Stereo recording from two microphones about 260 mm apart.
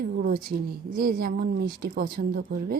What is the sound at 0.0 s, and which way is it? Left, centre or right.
A woman's voice, right.